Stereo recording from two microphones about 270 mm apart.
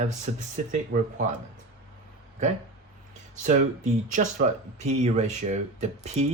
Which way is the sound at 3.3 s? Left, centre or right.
Right.